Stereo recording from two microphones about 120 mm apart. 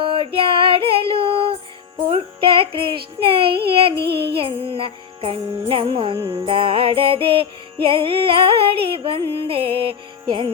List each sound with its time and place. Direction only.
0.0 s female singing: 50° right (ahead or behind)
2.0 s child singing: 50° right (ahead or behind)
6.1 s music: 30° right (ahead or behind)
6.4 s music: 50° right (ahead or behind)